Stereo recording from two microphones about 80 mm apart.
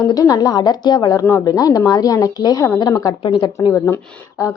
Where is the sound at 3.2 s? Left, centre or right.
Left.